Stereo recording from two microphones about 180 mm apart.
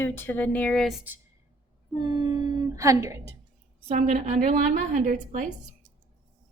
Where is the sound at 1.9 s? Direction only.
25° right (ahead or behind).